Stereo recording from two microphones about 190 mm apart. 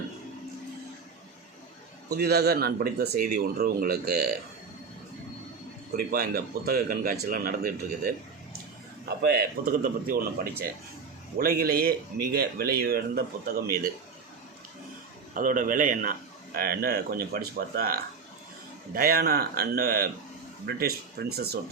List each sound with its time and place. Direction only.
2.1 s speech: 55° right (ahead or behind)
6.1 s speech: 55° right (ahead or behind)
15.4 s speech: 45° right (ahead or behind)